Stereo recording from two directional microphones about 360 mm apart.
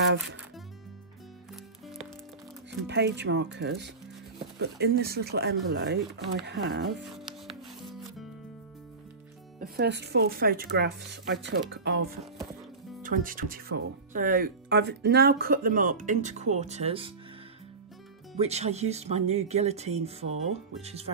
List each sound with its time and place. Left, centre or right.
0.0 s speech: right
1.5 s music: centre
2.9 s speech: right
7.1 s music: centre
9.6 s speech: right
13.0 s speech: right
18.3 s speech: centre